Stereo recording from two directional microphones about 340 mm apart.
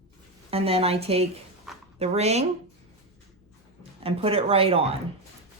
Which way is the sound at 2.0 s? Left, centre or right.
Centre.